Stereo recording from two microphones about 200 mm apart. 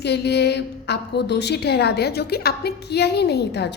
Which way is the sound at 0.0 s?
55° left (ahead or behind).